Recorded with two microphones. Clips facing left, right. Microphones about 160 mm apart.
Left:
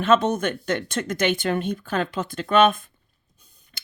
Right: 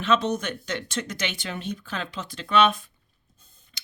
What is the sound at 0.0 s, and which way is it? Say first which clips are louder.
Speech: left 4 dB; 50° left (ahead or behind).